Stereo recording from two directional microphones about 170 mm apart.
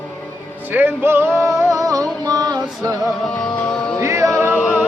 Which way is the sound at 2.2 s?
25° right (ahead or behind).